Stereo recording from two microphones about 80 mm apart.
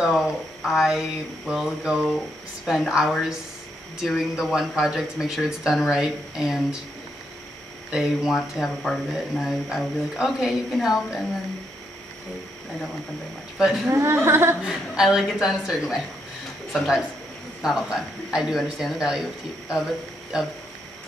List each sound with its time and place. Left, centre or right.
0.2 s speech: centre
2.1 s speech: centre
7.9 s speech: centre
13.6 s speech: centre
13.8 s speech: right
14.6 s speech: centre